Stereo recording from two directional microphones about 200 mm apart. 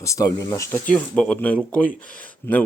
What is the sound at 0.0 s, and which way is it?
Speech, 15° left (ahead or behind).